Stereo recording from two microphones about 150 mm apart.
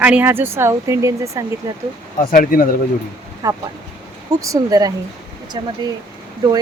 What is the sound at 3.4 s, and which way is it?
Speech, 25° right (ahead or behind).